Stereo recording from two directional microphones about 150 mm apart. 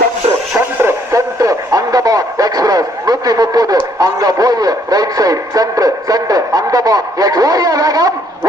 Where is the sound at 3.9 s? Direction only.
25° right (ahead or behind).